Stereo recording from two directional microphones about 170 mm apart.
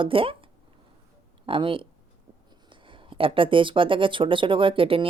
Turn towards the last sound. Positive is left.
turn(degrees=-30)  # may be behind; listen again after turning